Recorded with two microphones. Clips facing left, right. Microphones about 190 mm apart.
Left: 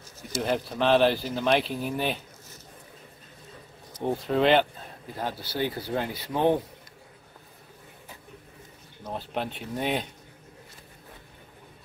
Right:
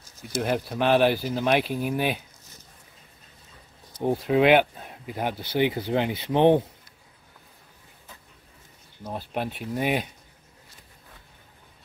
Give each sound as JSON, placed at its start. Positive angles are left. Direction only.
{"t": 0.4, "sound": "speech", "side_deg": -5}
{"t": 4.0, "sound": "speech", "side_deg": -10}
{"t": 9.0, "sound": "speech", "side_deg": -5}